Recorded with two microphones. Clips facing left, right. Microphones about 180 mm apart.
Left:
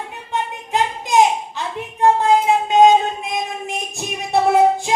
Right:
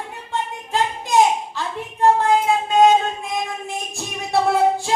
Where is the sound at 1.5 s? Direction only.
20° left (ahead or behind).